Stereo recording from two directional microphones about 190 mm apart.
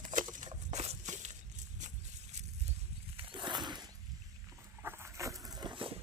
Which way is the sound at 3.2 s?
25° right (ahead or behind).